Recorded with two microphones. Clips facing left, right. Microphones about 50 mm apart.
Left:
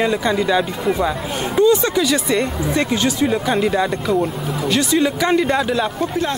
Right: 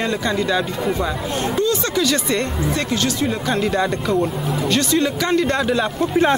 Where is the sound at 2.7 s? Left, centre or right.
Centre.